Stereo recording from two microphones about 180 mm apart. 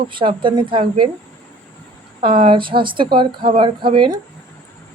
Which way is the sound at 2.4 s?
30° right (ahead or behind).